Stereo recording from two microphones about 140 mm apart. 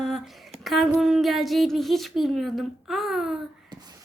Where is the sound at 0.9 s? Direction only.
Centre (ahead or behind).